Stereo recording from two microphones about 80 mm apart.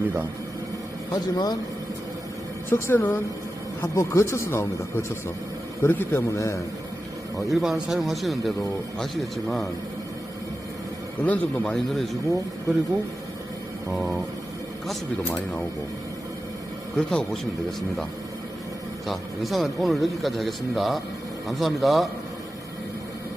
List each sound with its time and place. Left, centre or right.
1.1 s speech: left
2.6 s a man's voice: left
6.3 s speech: left
7.3 s a man's voice: centre
11.2 s a man's voice: centre
11.7 s a man's voice: centre
13.9 s a man's voice: centre
17.1 s a man's voice: centre
19.0 s a man's voice: centre